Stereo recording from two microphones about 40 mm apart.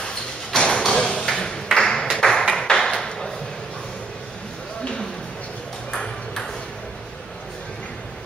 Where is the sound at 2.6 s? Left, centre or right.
Centre.